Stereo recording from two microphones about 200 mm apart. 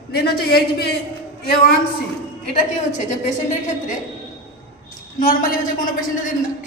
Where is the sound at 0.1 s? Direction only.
50° left (ahead or behind).